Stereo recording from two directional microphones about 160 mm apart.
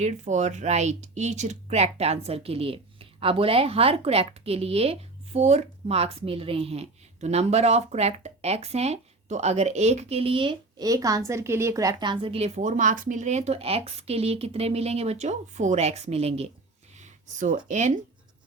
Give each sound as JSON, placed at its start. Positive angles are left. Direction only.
{"t": 0.0, "sound": "speech", "side_deg": -45}
{"t": 17.0, "sound": "a sound", "side_deg": -50}
{"t": 17.7, "sound": "speech", "side_deg": -50}